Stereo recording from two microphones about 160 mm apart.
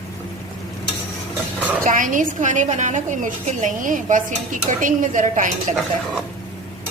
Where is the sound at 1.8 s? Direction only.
55° right (ahead or behind).